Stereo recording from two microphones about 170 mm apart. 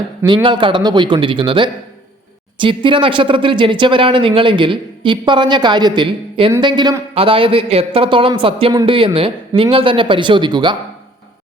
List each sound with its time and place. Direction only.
0.4 s a man's voice: 30° right (ahead or behind)